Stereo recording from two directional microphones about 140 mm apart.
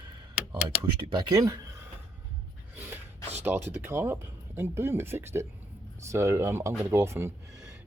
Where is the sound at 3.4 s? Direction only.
15° right (ahead or behind).